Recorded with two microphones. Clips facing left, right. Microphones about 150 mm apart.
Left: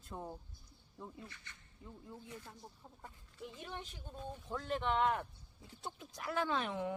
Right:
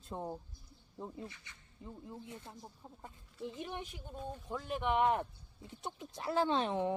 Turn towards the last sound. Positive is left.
turn(degrees=-30)  # may be behind; listen again after turning